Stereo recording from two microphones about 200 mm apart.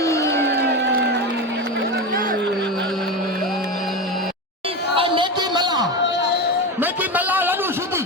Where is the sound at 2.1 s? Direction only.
45° right (ahead or behind).